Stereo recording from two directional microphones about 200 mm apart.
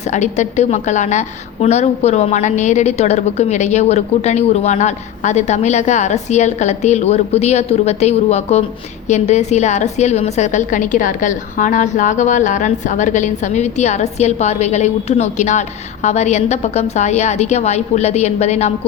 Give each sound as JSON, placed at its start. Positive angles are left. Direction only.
{"t": 0.1, "sound": "a woman's voice", "side_deg": 35}